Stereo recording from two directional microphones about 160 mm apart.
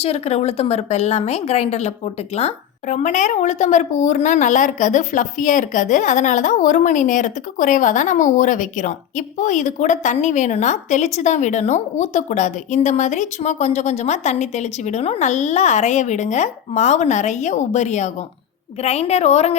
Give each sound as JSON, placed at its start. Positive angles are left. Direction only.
{"t": 0.0, "sound": "a woman's voice", "side_deg": 40}